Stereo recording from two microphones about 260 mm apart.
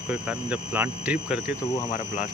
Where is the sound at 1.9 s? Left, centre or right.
Left.